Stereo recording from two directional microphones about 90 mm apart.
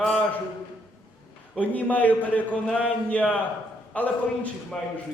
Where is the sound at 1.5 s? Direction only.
15° left (ahead or behind).